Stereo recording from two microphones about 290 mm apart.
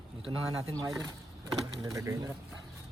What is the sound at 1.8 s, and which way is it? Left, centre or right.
Speech, centre.